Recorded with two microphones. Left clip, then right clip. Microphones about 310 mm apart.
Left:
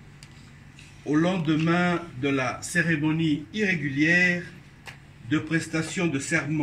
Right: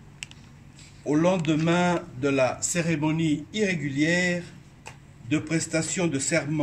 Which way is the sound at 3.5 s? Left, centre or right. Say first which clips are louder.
Left 1 dB; right.